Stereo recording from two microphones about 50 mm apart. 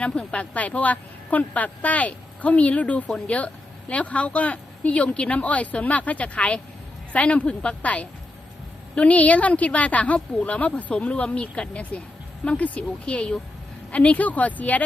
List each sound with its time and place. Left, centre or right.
0.0 s a woman's voice: centre